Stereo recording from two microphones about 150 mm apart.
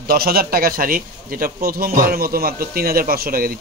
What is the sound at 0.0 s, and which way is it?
A man's voice, 90° right.